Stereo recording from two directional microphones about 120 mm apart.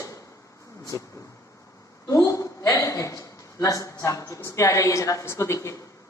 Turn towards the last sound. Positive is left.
turn(degrees=25)  # may be behind; listen again after turning